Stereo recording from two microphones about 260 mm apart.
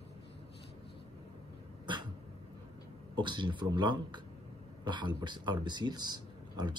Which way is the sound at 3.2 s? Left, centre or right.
Centre.